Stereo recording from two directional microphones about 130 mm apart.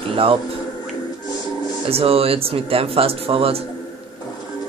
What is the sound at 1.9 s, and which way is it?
Speech, 50° right (ahead or behind).